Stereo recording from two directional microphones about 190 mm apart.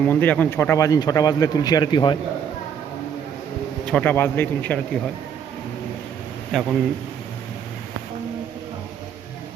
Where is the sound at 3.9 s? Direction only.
10° left (ahead or behind).